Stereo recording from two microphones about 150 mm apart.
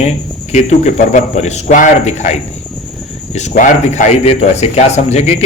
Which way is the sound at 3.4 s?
55° left (ahead or behind).